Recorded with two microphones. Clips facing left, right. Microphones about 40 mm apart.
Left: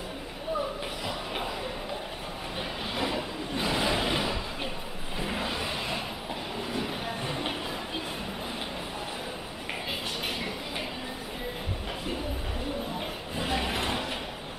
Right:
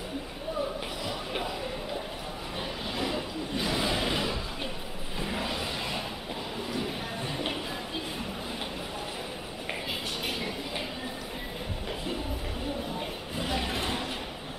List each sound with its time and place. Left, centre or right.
3.0 s a sound: left
5.2 s vehicle: centre
13.5 s vehicle: left